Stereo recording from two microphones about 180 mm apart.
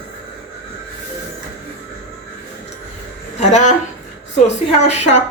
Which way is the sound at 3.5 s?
40° left (ahead or behind).